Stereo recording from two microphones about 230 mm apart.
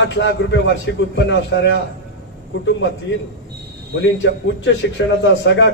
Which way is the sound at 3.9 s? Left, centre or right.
Left.